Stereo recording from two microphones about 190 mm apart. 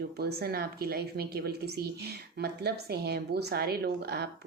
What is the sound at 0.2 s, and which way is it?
Speech, 55° right (ahead or behind).